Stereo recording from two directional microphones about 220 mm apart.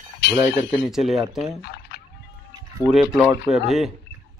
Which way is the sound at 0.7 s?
Centre (ahead or behind).